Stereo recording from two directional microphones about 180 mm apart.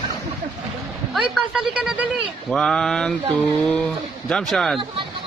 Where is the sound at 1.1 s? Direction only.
Centre (ahead or behind).